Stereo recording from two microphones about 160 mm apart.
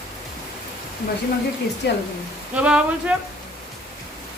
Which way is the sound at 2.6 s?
5° right (ahead or behind).